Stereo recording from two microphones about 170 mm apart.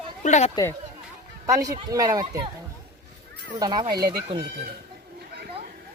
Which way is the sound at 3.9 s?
65° right (ahead or behind).